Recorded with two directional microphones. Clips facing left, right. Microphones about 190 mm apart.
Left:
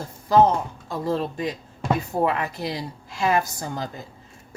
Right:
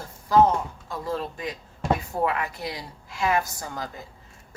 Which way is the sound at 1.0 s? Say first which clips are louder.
Left 5 dB; 25° left (ahead or behind).